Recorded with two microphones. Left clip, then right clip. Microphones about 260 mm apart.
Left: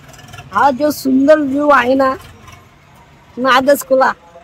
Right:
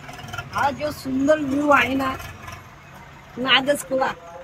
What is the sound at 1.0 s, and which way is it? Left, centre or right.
A woman's voice, left.